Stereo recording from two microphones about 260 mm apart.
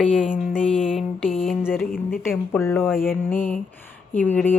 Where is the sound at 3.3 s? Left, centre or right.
Left.